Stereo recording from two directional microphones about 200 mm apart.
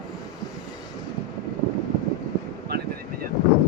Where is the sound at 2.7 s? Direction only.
55° right (ahead or behind).